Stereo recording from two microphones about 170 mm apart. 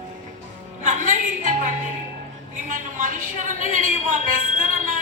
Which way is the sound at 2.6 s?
50° right (ahead or behind).